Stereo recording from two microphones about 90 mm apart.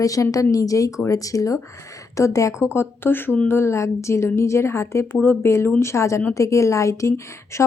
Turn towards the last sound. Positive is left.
turn(degrees=35)  # may be behind; listen again after turning